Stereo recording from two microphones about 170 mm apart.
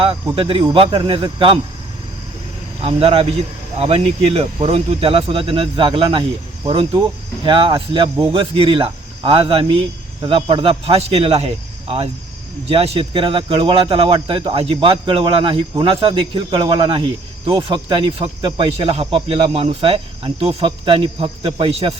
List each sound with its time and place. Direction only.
0.3 s speech: 30° right (ahead or behind)
2.8 s speech: 35° right (ahead or behind)